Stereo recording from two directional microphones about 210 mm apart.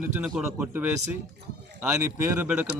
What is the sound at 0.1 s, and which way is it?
Speech, 5° right (ahead or behind).